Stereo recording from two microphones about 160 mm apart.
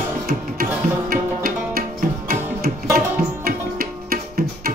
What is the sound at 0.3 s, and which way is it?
Music, 65° right (ahead or behind).